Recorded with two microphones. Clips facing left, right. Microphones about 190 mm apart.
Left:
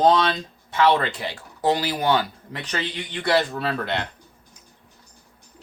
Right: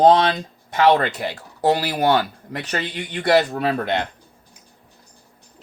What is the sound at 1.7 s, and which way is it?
Speech, 60° right (ahead or behind).